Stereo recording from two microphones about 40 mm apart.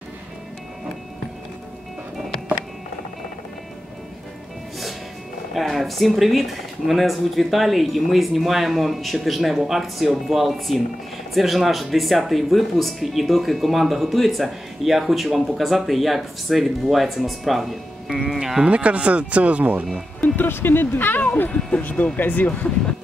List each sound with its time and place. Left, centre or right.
5.5 s speech: centre
18.7 s speech: right
20.3 s speech: left
21.5 s speech: centre
21.8 s speech: left
22.2 s speech: left